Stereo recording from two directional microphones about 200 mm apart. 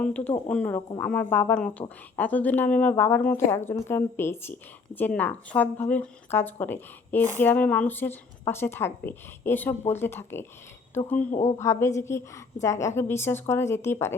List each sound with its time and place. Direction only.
0.0 s a woman's voice: 5° left (ahead or behind)
11.3 s speech: 35° left (ahead or behind)
11.5 s a woman's voice: 15° left (ahead or behind)